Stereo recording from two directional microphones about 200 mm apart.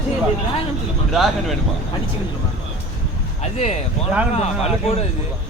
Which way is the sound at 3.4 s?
35° left (ahead or behind).